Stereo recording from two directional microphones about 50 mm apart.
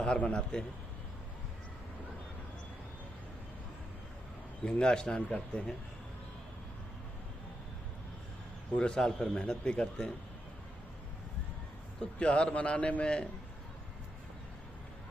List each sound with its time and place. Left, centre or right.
0.2 s a man's voice: left
4.6 s a man's voice: centre
8.7 s a man's voice: left
9.0 s a man's voice: centre
9.3 s a man's voice: left
11.9 s a man's voice: left